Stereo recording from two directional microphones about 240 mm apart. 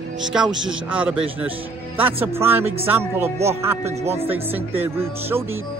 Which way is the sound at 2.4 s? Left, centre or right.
Centre.